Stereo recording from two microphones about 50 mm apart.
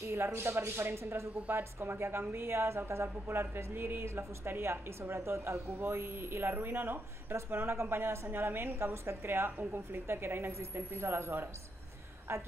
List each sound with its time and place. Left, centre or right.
0.1 s a woman's voice: right